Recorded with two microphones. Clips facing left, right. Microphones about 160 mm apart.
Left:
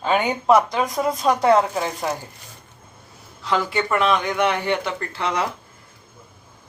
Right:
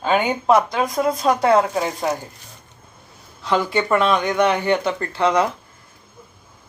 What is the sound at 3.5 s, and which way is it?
Speech, 20° right (ahead or behind).